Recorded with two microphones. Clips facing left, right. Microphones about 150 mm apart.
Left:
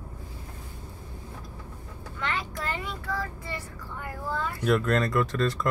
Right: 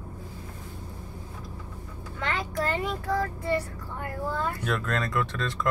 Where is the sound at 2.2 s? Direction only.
35° right (ahead or behind).